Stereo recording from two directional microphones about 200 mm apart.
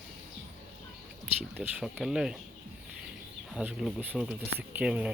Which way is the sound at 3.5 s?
5° right (ahead or behind).